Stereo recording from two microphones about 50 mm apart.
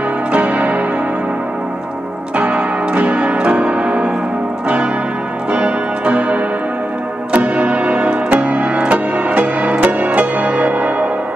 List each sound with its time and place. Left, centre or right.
0.3 s music: right
2.3 s music: right
5.5 s music: right